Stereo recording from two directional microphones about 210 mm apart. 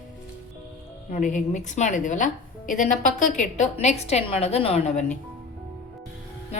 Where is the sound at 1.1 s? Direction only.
35° left (ahead or behind).